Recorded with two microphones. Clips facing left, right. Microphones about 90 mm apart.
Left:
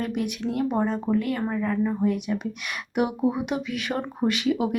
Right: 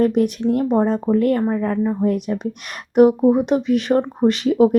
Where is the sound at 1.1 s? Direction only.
45° right (ahead or behind).